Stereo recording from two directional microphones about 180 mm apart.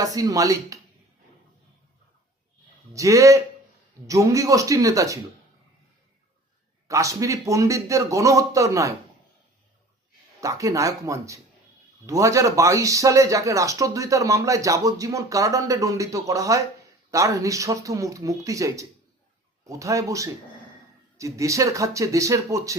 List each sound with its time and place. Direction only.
0.0 s speech: 20° right (ahead or behind)
2.9 s speech: 15° right (ahead or behind)
6.8 s speech: 15° right (ahead or behind)
10.4 s speech: 20° right (ahead or behind)